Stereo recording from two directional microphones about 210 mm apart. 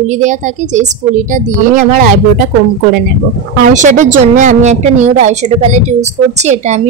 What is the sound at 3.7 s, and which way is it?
A woman's voice, 35° right (ahead or behind).